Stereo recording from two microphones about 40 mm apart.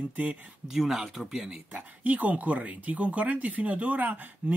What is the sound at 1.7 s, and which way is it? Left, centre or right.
Speech, right.